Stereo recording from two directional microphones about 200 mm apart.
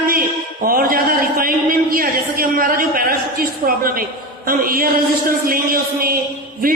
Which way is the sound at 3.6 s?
45° right (ahead or behind).